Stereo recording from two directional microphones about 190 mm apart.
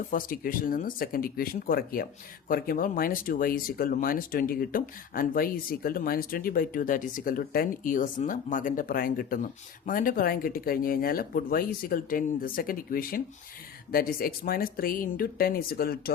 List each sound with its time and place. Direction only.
0.1 s speech: 45° left (ahead or behind)